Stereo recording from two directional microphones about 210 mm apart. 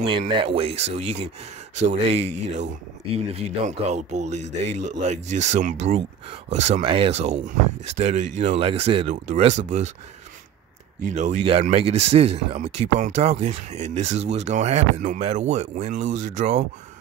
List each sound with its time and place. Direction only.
0.0 s speech: 25° right (ahead or behind)
11.1 s speech: 30° right (ahead or behind)